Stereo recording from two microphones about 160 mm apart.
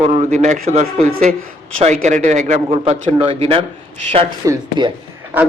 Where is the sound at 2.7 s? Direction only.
35° right (ahead or behind).